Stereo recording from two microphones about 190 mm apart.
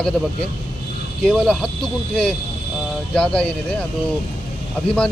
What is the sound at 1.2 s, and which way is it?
Speech, 5° left (ahead or behind).